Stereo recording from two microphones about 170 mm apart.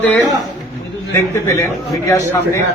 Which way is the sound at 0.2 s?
20° right (ahead or behind).